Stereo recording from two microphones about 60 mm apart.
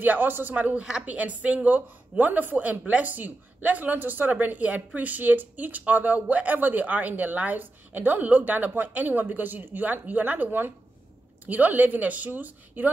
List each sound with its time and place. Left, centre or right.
0.0 s a man's voice: right